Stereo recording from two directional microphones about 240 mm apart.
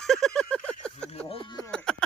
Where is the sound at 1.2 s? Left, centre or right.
Centre.